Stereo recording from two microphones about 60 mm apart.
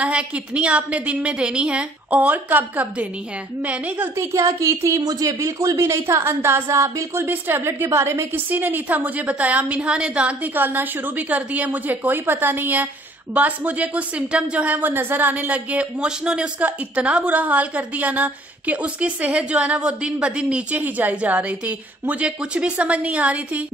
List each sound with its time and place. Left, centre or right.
0.0 s a woman's voice: centre
4.2 s a woman's voice: right
5.0 s speech: right
5.8 s a woman's voice: right
8.3 s a woman's voice: right
10.5 s a woman's voice: right
20.7 s a woman's voice: right